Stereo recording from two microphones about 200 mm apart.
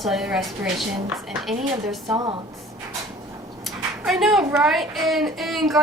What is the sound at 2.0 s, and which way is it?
Speech, 20° right (ahead or behind).